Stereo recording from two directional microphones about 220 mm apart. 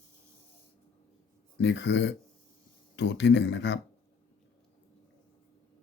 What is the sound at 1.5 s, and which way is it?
Speech, 55° left (ahead or behind).